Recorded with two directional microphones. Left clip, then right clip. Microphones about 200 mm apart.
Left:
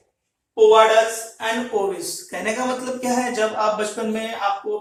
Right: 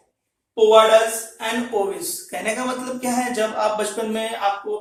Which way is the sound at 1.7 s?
10° left (ahead or behind).